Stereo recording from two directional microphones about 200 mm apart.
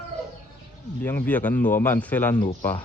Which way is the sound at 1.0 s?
10° left (ahead or behind).